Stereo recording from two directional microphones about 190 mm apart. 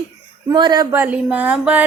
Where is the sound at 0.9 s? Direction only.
10° right (ahead or behind).